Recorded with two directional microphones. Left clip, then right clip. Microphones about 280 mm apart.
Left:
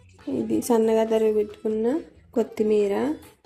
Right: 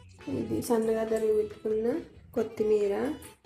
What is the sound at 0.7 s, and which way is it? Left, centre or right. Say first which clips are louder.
Speech: left 7 dB; left.